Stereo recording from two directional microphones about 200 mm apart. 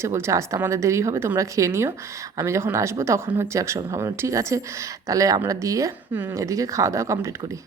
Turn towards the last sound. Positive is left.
turn(degrees=-15)  # may be behind; listen again after turning